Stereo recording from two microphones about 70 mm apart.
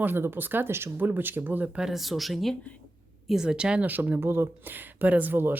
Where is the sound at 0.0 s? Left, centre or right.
Right.